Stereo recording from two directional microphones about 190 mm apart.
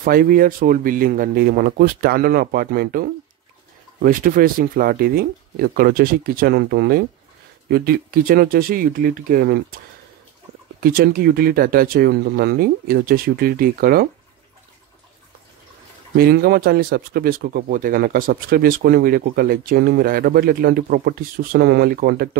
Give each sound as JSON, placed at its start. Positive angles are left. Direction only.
{"t": 0.0, "sound": "speech", "side_deg": -50}
{"t": 10.8, "sound": "speech", "side_deg": -50}
{"t": 16.2, "sound": "speech", "side_deg": -55}